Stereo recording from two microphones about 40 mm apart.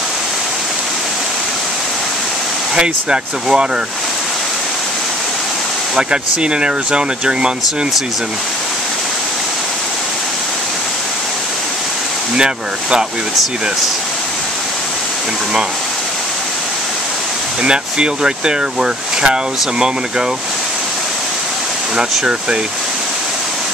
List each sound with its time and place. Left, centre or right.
2.7 s speech: right
5.9 s speech: right
12.4 s speech: right
17.6 s speech: right